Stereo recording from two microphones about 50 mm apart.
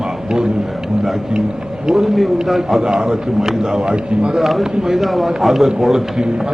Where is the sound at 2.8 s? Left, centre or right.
Centre.